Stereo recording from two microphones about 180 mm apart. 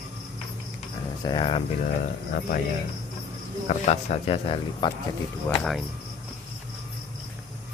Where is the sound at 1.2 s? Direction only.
25° left (ahead or behind).